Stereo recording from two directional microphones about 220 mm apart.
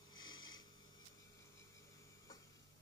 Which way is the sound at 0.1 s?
20° left (ahead or behind).